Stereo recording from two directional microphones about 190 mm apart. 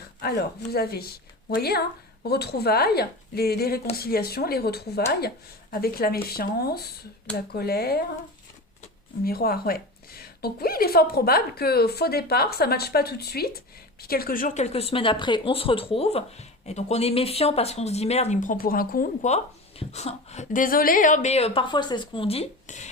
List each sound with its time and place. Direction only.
0.2 s a woman's voice: 55° left (ahead or behind)
9.2 s a woman's voice: 50° left (ahead or behind)
19.3 s speech: 35° left (ahead or behind)